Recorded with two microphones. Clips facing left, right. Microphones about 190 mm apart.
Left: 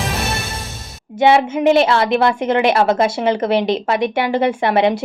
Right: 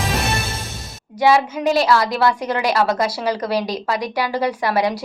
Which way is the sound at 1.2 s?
25° left (ahead or behind).